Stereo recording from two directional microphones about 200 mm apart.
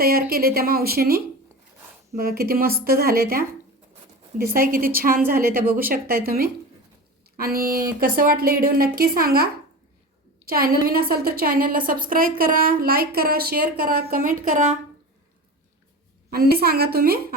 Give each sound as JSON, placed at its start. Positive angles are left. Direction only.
{"t": 0.0, "sound": "a woman's voice", "side_deg": -50}
{"t": 16.3, "sound": "speech", "side_deg": -50}